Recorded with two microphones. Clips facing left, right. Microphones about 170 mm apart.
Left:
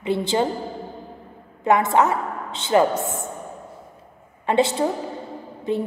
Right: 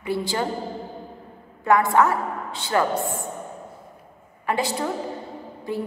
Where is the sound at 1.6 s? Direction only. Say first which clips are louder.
Left 1 dB; 20° left (ahead or behind).